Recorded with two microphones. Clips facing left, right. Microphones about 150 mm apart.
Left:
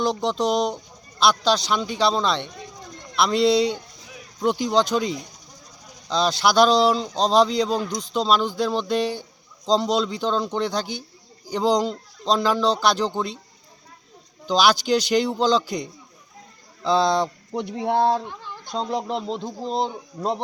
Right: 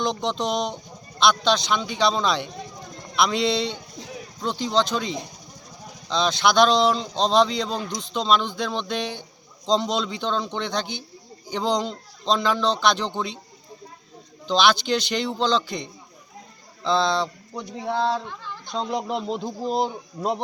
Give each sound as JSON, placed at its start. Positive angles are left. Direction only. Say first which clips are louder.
{"t": 0.0, "sound": "speech", "louder": "left 3 dB", "side_deg": 5}
{"t": 4.6, "sound": "speech", "louder": "even", "side_deg": 45}
{"t": 6.1, "sound": "speech", "louder": "left 1 dB", "side_deg": 5}
{"t": 14.4, "sound": "speech", "louder": "left 1 dB", "side_deg": 10}